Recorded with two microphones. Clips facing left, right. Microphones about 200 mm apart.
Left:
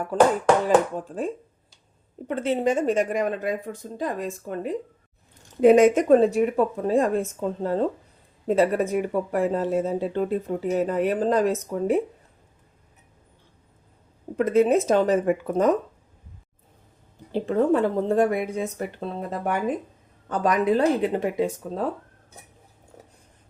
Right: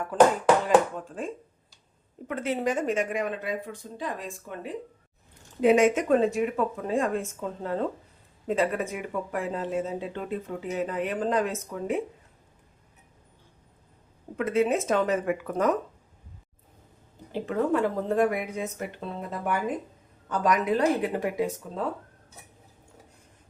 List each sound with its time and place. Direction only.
0.9 s speech: 35° left (ahead or behind)
14.3 s speech: 40° left (ahead or behind)
17.3 s speech: 30° left (ahead or behind)